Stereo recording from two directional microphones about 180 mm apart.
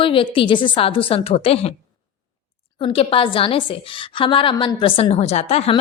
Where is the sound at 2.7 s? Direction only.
35° left (ahead or behind).